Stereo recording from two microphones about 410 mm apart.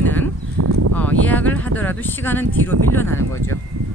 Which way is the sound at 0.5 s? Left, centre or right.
Right.